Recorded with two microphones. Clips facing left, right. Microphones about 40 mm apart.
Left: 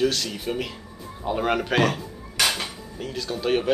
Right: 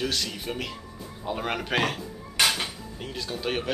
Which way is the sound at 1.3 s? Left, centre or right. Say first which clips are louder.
Left 5 dB; centre.